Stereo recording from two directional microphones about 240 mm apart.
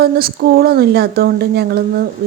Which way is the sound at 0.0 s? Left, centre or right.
Right.